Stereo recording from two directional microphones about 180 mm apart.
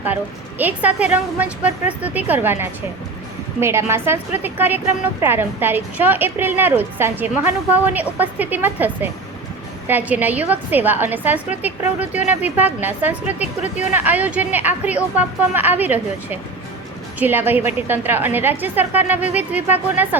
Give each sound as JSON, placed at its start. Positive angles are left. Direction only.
{"t": 0.6, "sound": "a woman's voice", "side_deg": -10}
{"t": 13.4, "sound": "speech", "side_deg": 40}
{"t": 13.9, "sound": "a woman's voice", "side_deg": -10}